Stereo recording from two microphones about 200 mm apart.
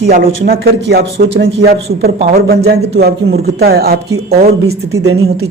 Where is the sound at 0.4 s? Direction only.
50° right (ahead or behind).